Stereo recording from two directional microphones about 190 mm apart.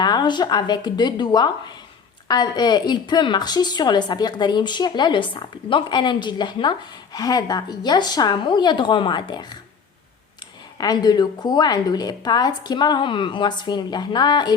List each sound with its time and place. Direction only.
0.0 s a woman's voice: 20° left (ahead or behind)
10.8 s a woman's voice: 20° left (ahead or behind)